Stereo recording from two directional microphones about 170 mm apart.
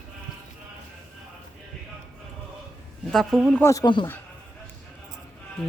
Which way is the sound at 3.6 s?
15° left (ahead or behind).